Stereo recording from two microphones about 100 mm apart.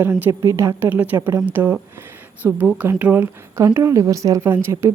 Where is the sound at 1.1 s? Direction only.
30° right (ahead or behind).